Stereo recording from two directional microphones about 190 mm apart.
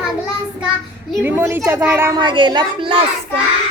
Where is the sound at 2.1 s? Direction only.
25° right (ahead or behind).